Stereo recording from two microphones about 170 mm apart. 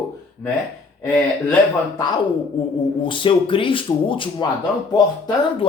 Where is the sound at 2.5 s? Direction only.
30° left (ahead or behind).